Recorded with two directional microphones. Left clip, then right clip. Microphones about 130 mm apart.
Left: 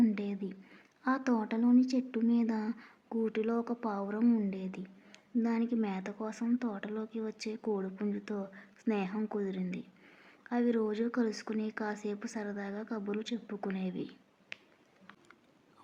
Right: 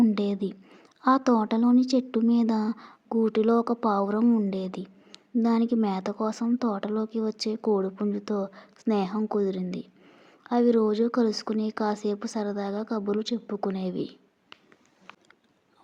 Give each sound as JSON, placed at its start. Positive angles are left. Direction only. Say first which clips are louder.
{"t": 0.1, "sound": "speech", "louder": "right 10 dB", "side_deg": -50}
{"t": 4.2, "sound": "a woman's voice", "louder": "right 7 dB", "side_deg": -30}
{"t": 4.4, "sound": "a woman's voice", "louder": "right 9 dB", "side_deg": -45}